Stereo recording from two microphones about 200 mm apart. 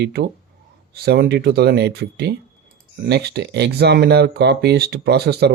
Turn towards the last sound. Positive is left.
turn(degrees=-55)  # may be behind; listen again after turning